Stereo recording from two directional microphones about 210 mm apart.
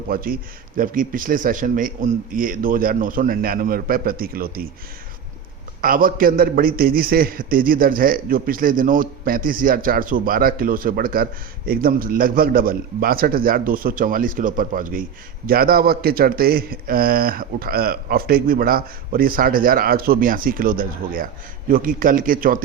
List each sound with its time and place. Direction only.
0.1 s a man's voice: 45° right (ahead or behind)
5.8 s a man's voice: 40° right (ahead or behind)